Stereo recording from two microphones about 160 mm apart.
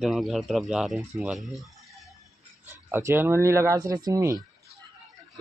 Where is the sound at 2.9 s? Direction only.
15° right (ahead or behind).